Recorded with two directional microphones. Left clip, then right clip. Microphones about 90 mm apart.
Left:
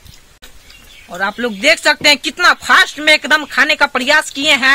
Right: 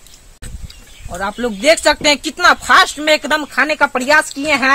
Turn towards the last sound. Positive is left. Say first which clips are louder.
# left 2 dB
turn(degrees=25)  # may be behind; listen again after turning